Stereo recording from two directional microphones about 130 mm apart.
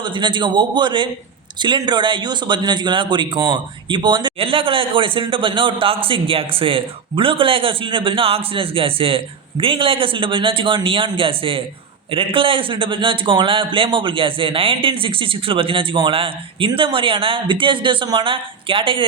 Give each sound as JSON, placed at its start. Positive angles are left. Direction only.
{"t": 0.0, "sound": "a man's voice", "side_deg": -40}